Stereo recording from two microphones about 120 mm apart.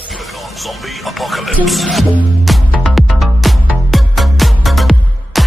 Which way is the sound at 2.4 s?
Centre (ahead or behind).